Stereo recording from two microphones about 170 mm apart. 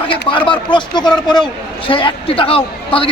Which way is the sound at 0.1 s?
30° left (ahead or behind).